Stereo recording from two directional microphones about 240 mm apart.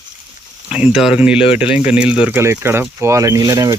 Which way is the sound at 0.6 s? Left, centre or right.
Centre.